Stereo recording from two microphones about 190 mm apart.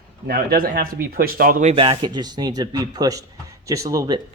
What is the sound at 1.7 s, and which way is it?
Speech, 30° right (ahead or behind).